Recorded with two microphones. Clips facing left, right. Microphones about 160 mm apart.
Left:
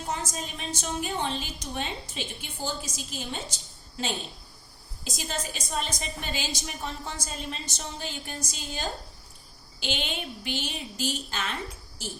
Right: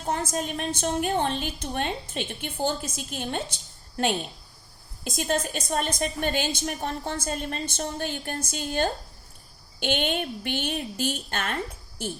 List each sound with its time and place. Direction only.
0.1 s a woman's voice: 55° right (ahead or behind)